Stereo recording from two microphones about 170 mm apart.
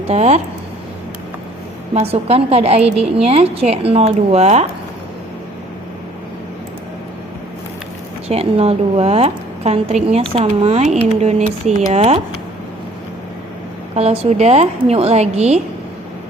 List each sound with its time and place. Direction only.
0.1 s a woman's voice: 40° right (ahead or behind)
1.9 s a woman's voice: 35° right (ahead or behind)
8.3 s a woman's voice: 35° right (ahead or behind)
13.9 s a woman's voice: 35° right (ahead or behind)